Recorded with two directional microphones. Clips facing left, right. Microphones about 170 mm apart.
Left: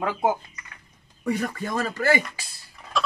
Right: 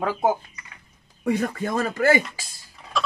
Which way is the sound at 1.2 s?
55° right (ahead or behind).